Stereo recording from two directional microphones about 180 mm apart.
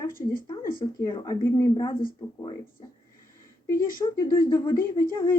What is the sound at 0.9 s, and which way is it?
Speech, 20° left (ahead or behind).